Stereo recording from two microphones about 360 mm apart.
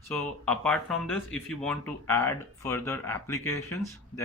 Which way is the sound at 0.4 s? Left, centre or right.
Centre.